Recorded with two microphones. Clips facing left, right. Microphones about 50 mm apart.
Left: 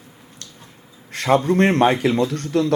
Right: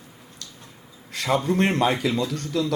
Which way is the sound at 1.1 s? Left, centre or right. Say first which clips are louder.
Left 5 dB; left.